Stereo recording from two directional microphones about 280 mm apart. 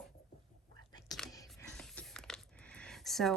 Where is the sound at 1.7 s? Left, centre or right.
Centre.